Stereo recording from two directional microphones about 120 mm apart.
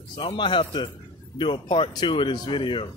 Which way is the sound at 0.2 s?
45° left (ahead or behind).